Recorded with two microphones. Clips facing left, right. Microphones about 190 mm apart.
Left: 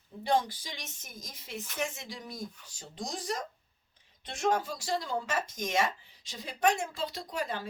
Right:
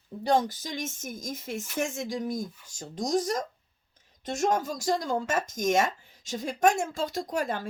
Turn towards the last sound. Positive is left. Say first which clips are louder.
# right 6 dB
turn(degrees=-45)  # may be behind; listen again after turning